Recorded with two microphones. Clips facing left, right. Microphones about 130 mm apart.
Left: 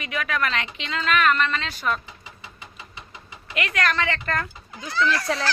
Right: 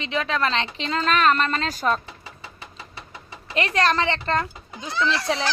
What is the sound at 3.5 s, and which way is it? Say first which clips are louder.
A woman's voice: right 4 dB; 30° right (ahead or behind).